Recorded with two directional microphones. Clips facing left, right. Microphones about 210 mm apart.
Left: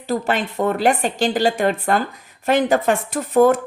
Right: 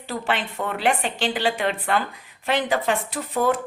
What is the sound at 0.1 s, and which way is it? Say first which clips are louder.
Speech: left 6 dB; 40° left (ahead or behind).